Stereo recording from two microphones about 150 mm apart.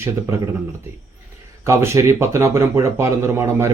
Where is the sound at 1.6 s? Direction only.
15° right (ahead or behind).